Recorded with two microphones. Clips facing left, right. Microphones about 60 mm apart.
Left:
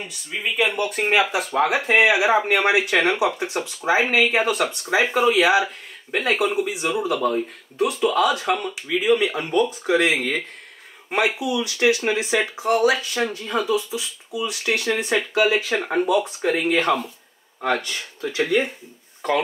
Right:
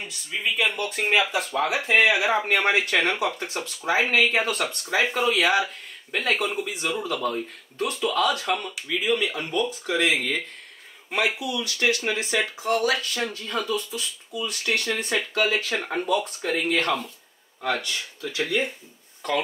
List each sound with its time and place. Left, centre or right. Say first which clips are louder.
0.0 s speech: left 1 dB; centre
11.2 s speech: left 4 dB; centre
18.4 s speech: left 5 dB; centre